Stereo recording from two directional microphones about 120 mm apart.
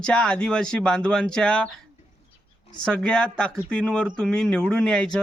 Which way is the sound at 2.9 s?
5° left (ahead or behind).